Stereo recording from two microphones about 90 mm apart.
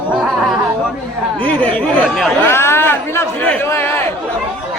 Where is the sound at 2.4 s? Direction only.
25° left (ahead or behind).